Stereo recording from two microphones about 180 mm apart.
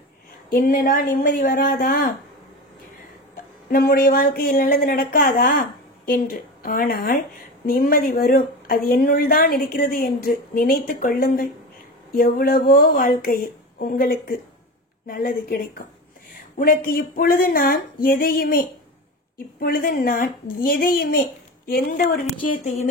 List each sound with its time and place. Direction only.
0.5 s speech: 50° left (ahead or behind)
3.7 s speech: 50° left (ahead or behind)